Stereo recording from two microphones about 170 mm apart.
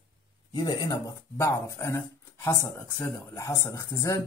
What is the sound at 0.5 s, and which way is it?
Speech, 25° left (ahead or behind).